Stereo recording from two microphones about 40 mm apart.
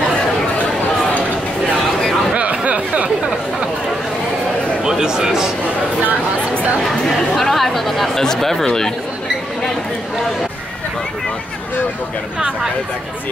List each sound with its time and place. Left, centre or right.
2.3 s chatter: right
4.8 s a sound: centre
6.8 s chatter: centre